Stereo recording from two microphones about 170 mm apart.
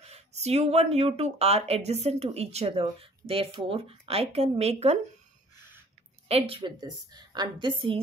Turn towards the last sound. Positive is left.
turn(degrees=-30)  # may be behind; listen again after turning